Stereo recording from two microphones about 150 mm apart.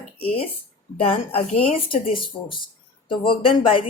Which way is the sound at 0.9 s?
40° left (ahead or behind).